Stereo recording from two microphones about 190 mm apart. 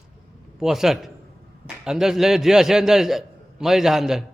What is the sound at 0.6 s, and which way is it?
A man's voice, centre (ahead or behind).